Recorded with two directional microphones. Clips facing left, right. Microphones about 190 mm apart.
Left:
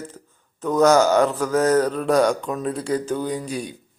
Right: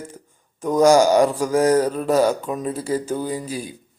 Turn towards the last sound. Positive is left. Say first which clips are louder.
# even
turn(degrees=-5)  # may be behind; listen again after turning